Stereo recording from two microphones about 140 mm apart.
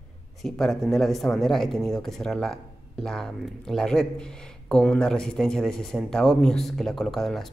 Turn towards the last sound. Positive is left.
turn(degrees=5)  # may be behind; listen again after turning